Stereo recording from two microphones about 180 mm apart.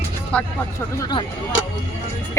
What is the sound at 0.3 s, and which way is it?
Speech, 5° left (ahead or behind).